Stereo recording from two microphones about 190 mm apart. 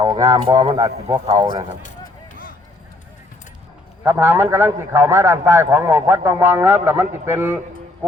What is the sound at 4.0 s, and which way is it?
A man's voice, 10° right (ahead or behind).